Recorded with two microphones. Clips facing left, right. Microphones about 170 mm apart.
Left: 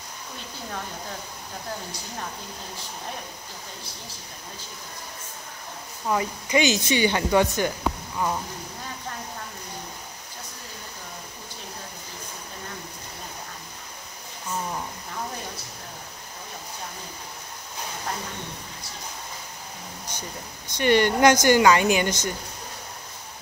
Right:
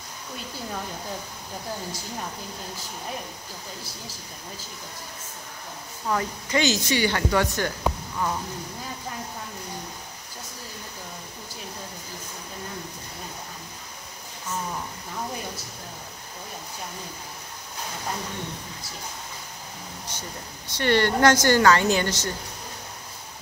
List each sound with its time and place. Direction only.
6.0 s speech: 15° left (ahead or behind)
20.1 s speech: 15° left (ahead or behind)